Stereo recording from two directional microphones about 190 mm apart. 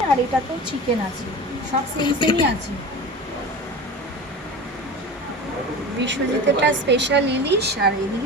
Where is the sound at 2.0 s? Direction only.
25° left (ahead or behind).